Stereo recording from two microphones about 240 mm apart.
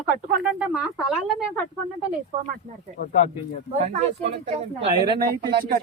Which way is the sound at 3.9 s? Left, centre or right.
Right.